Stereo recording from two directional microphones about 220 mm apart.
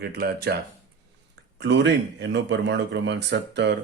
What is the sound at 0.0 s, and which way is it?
Speech, 45° right (ahead or behind).